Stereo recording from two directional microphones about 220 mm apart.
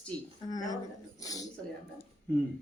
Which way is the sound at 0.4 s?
15° left (ahead or behind).